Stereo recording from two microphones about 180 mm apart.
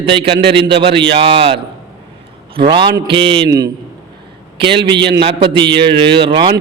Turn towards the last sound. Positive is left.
turn(degrees=-25)  # may be behind; listen again after turning